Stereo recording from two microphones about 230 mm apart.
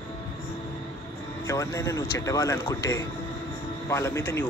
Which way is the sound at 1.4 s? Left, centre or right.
Centre.